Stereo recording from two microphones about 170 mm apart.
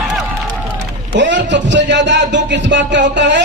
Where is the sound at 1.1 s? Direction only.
90° right.